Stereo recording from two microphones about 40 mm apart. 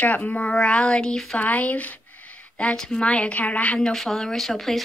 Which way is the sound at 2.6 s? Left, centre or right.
Centre.